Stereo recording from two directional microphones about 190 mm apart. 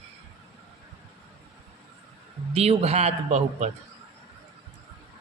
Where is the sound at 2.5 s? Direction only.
35° right (ahead or behind).